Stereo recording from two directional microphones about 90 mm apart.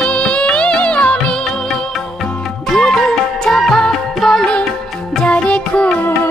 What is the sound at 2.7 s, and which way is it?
Music, 5° left (ahead or behind).